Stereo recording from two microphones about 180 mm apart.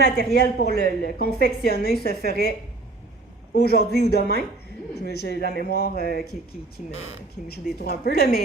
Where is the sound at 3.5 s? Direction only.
65° left (ahead or behind).